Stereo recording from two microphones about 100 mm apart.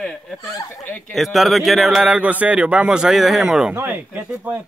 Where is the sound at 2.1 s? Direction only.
15° right (ahead or behind).